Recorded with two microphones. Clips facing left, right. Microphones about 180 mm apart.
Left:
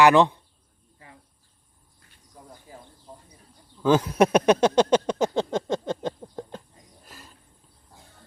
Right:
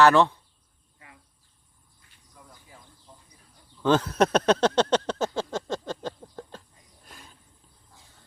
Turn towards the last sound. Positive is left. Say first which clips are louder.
# left 2 dB
turn(degrees=0)  # may be behind; listen again after turning